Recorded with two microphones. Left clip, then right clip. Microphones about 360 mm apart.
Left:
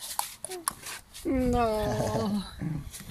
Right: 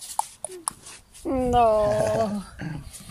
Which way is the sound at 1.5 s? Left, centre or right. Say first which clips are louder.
Right 10 dB; centre.